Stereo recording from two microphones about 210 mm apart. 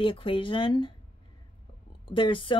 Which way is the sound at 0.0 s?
25° left (ahead or behind).